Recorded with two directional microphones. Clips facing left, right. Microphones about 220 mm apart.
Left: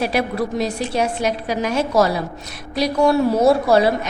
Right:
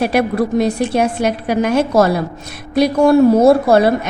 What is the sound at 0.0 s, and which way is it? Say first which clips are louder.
A woman's voice: right 5 dB; 55° right (ahead or behind).